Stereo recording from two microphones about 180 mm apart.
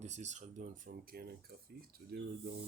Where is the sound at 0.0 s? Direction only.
40° right (ahead or behind); by 2.3 s 60° right (ahead or behind).